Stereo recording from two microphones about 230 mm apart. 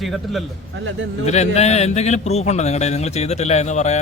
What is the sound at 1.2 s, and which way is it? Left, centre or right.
A man's voice, left.